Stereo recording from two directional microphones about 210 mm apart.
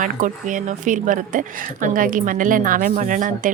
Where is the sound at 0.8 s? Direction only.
40° right (ahead or behind).